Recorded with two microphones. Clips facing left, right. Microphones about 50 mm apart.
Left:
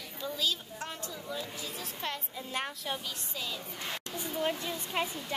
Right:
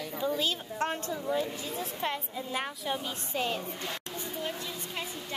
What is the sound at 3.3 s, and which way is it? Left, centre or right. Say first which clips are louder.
Speech: right 9 dB; right.